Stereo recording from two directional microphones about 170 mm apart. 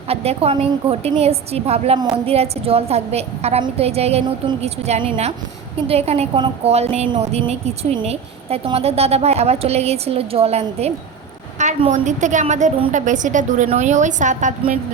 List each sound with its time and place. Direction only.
0.1 s a woman's voice: 35° right (ahead or behind)